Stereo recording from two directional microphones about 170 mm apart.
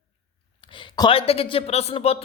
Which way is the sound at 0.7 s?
30° left (ahead or behind).